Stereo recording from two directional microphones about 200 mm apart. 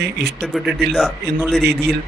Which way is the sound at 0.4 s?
Centre (ahead or behind).